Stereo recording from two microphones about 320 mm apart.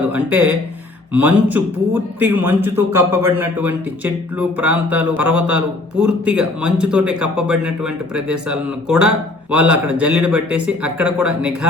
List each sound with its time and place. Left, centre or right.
0.1 s speech: centre
5.2 s a man's voice: right
6.0 s speech: centre